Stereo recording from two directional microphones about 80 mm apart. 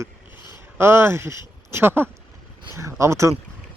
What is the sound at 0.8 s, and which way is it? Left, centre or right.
Speech, right.